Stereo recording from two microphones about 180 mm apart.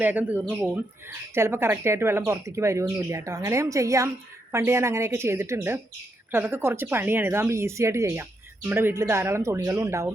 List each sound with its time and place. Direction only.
0.0 s speech: 10° right (ahead or behind)